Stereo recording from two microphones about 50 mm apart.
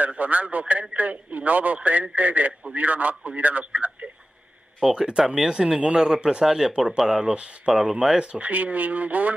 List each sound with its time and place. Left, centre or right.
0.0 s speech: right
4.7 s speech: centre; by 9.3 s right